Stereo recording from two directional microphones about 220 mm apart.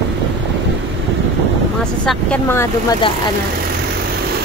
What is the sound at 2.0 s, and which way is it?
Speech, 10° left (ahead or behind).